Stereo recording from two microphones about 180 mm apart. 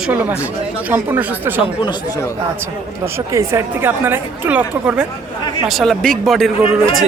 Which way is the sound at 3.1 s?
15° right (ahead or behind).